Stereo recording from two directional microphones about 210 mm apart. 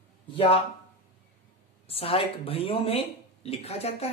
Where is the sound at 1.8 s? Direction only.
30° left (ahead or behind).